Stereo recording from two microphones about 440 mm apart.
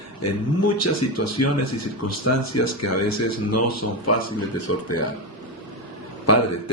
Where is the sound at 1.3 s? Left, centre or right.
Left.